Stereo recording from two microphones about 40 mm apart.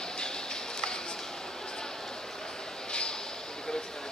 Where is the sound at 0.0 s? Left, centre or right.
Centre.